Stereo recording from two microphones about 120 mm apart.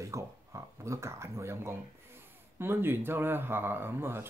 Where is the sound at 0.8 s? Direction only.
25° right (ahead or behind).